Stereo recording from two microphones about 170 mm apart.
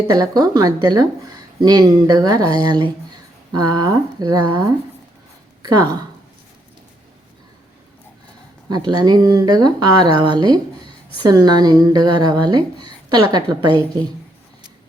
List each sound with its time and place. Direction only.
0.1 s speech: 20° right (ahead or behind)
8.7 s speech: 25° right (ahead or behind)